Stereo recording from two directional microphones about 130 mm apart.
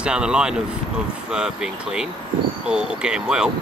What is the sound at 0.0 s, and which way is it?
Speech, 5° right (ahead or behind).